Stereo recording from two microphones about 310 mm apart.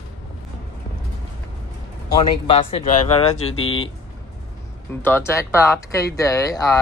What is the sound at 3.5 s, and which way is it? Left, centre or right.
Speech, left.